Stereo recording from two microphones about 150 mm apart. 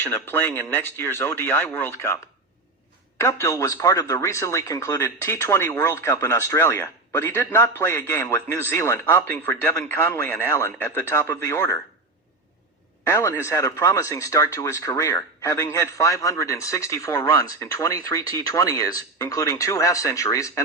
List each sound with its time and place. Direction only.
0.0 s a man's voice: 15° left (ahead or behind)
3.2 s a man's voice: 20° left (ahead or behind)
13.1 s speech: 20° left (ahead or behind)